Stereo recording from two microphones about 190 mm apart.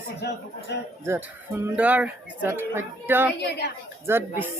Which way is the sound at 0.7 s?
65° left (ahead or behind).